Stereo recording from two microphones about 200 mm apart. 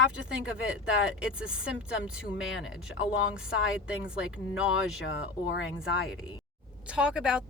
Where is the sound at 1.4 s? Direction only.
75° left (ahead or behind).